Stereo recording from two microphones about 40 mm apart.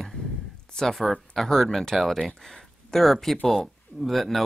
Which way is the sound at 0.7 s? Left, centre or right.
Centre.